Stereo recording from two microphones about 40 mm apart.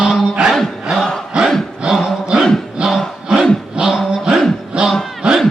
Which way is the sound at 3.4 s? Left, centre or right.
Centre.